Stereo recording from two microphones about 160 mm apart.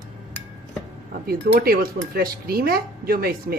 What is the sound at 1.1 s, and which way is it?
Speech, 70° right (ahead or behind).